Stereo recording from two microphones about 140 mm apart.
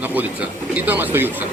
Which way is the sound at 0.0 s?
10° right (ahead or behind).